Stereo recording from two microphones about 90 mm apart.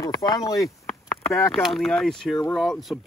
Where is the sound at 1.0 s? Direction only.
35° left (ahead or behind).